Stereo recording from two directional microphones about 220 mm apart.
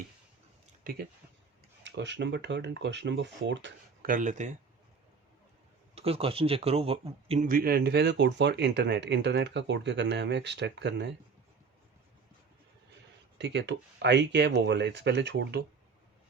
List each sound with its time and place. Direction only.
1.8 s speech: 55° right (ahead or behind)
4.0 s speech: 40° right (ahead or behind)
5.9 s speech: 25° right (ahead or behind)
7.4 s speech: 40° right (ahead or behind)
13.4 s speech: 55° right (ahead or behind)